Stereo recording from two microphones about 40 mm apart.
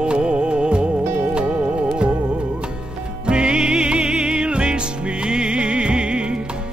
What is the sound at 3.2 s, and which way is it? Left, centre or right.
Music, right.